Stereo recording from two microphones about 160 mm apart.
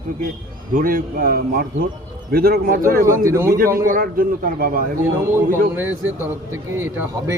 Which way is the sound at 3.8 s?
60° right (ahead or behind).